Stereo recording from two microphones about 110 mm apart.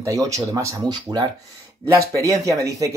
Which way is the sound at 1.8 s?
30° right (ahead or behind).